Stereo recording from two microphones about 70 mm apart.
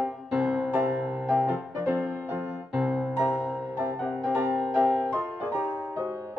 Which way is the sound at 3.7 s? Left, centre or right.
Right.